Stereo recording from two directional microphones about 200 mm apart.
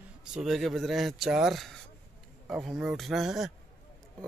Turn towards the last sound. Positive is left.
turn(degrees=0)  # may be behind; listen again after turning